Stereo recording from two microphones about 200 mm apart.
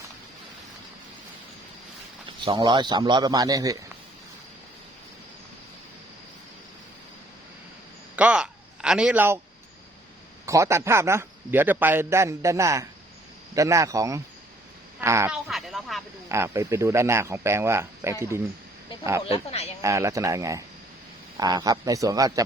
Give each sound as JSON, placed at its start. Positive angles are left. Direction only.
{"t": 2.4, "sound": "a man's voice", "side_deg": -25}
{"t": 8.1, "sound": "a sound", "side_deg": -5}
{"t": 10.4, "sound": "a man's voice", "side_deg": -15}
{"t": 15.3, "sound": "a sound", "side_deg": 0}
{"t": 16.3, "sound": "a man's voice", "side_deg": -15}
{"t": 19.2, "sound": "speech", "side_deg": 30}
{"t": 19.8, "sound": "a man's voice", "side_deg": -15}